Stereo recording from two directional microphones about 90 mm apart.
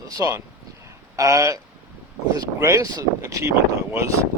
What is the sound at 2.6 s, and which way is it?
Speech, 35° right (ahead or behind).